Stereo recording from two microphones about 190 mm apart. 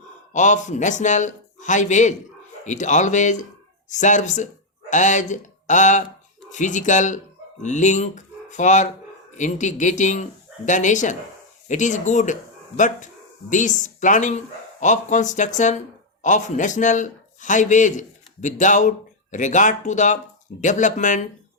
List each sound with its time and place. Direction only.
0.3 s a man's voice: 40° left (ahead or behind)